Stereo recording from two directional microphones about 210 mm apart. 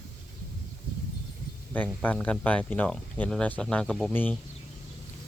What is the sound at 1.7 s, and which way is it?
Speech, 10° left (ahead or behind).